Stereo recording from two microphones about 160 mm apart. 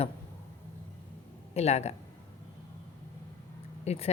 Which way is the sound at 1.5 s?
40° left (ahead or behind).